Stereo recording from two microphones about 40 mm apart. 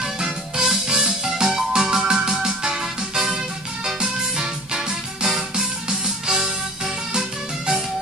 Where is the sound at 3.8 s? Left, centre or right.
Centre.